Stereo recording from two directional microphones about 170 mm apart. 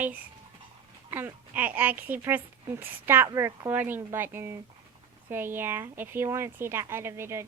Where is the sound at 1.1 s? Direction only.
10° right (ahead or behind).